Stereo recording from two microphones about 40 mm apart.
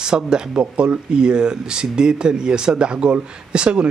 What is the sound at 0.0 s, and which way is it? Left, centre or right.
A man's voice, centre.